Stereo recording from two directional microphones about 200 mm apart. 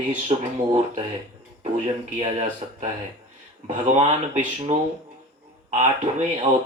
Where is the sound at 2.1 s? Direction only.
35° right (ahead or behind).